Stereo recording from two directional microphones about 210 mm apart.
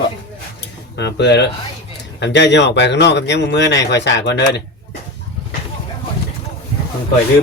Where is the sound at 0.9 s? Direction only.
55° left (ahead or behind).